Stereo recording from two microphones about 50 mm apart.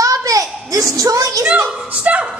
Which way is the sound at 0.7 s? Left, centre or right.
Right.